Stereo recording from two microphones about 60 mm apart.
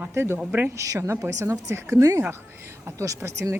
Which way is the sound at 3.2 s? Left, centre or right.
Right.